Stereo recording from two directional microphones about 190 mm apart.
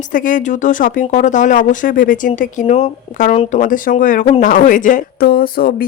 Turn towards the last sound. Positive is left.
turn(degrees=50)  # may be behind; listen again after turning